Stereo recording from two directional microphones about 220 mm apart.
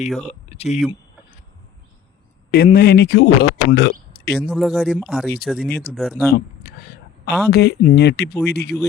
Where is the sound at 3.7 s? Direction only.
50° left (ahead or behind).